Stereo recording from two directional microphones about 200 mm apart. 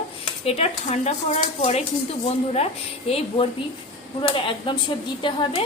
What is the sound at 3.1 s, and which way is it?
Speech, 30° left (ahead or behind).